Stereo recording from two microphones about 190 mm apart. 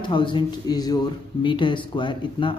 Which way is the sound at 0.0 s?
25° left (ahead or behind).